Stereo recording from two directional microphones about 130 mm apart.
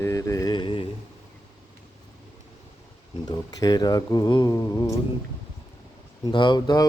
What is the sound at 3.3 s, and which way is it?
Speech, 30° left (ahead or behind).